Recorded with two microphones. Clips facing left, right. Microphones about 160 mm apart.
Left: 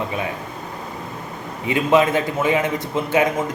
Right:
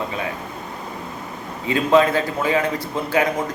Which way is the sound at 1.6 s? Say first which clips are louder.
Even; 20° left (ahead or behind).